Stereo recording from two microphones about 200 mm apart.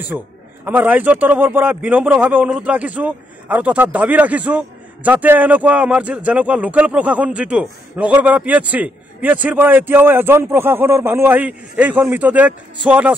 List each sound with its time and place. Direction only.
0.1 s a man's voice: 5° right (ahead or behind)